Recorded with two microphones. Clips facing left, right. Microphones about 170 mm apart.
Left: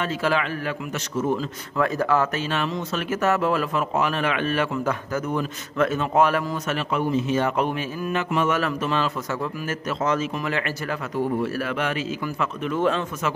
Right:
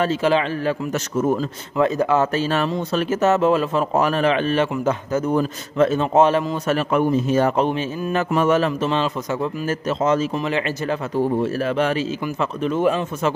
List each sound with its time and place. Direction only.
0.2 s speech: 25° right (ahead or behind)
0.9 s a man's voice: 45° right (ahead or behind)
1.8 s speech: 20° right (ahead or behind)
2.3 s a man's voice: 35° right (ahead or behind)
3.9 s a man's voice: 40° right (ahead or behind)
6.7 s a man's voice: 50° right (ahead or behind)
7.5 s speech: 30° right (ahead or behind)
8.2 s a man's voice: 40° right (ahead or behind)
8.5 s speech: 25° right (ahead or behind)